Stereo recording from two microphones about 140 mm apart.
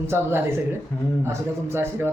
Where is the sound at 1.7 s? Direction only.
15° right (ahead or behind).